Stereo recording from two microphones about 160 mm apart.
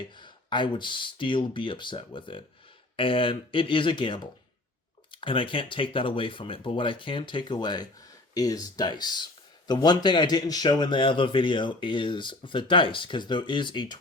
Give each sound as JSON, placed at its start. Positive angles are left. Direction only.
{"t": 0.2, "sound": "speech", "side_deg": 30}